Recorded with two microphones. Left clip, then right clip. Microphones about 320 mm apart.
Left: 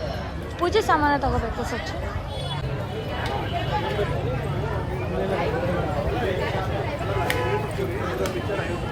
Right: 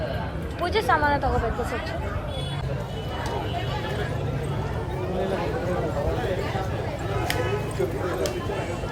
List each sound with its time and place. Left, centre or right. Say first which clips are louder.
0.6 s speech: left 2 dB; centre